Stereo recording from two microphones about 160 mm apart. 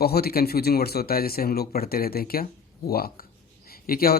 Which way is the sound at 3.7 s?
70° left (ahead or behind).